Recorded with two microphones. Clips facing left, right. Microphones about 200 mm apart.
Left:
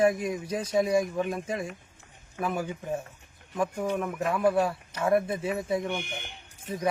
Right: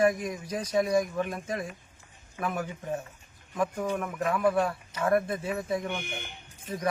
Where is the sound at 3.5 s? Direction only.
Centre (ahead or behind).